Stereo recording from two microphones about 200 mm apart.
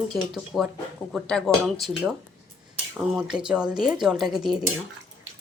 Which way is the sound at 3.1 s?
5° right (ahead or behind).